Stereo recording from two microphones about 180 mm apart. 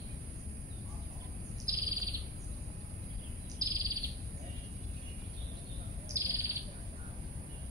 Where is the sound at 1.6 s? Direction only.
20° right (ahead or behind).